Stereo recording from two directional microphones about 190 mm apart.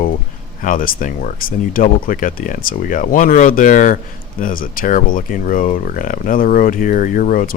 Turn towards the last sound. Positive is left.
turn(degrees=45)  # may be behind; listen again after turning